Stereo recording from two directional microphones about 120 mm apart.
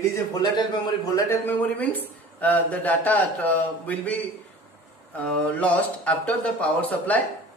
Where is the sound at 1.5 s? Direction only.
15° left (ahead or behind).